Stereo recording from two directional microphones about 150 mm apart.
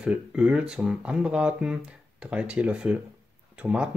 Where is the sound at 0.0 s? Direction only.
5° right (ahead or behind).